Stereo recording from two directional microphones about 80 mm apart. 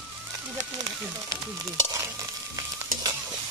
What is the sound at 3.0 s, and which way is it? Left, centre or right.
Stir, right.